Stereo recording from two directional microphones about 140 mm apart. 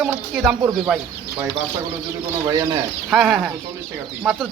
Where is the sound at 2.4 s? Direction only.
30° right (ahead or behind).